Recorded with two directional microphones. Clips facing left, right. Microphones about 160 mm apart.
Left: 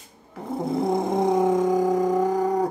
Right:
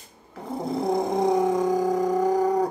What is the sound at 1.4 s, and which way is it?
Music, 25° left (ahead or behind).